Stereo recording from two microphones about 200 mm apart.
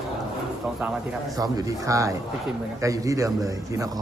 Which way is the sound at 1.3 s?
20° right (ahead or behind).